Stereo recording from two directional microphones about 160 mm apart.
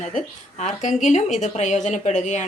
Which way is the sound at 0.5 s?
45° left (ahead or behind).